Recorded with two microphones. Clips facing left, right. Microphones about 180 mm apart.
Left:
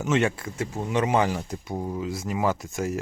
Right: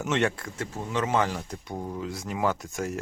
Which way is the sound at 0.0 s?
5° left (ahead or behind).